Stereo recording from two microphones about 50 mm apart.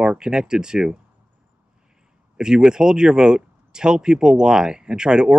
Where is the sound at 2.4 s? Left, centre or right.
Centre.